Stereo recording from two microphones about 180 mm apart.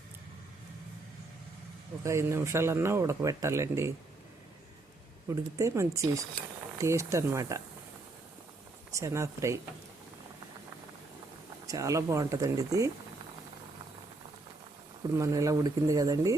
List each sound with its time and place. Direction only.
2.0 s speech: 15° right (ahead or behind)
5.3 s speech: 15° right (ahead or behind)
8.9 s speech: 15° right (ahead or behind)
11.6 s speech: 20° right (ahead or behind)
15.1 s speech: 15° right (ahead or behind)